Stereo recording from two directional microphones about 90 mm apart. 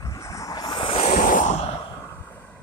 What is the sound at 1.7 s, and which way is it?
Vehicle, 60° left (ahead or behind).